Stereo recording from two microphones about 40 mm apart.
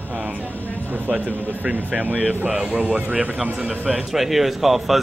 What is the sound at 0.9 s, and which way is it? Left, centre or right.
Speech, right.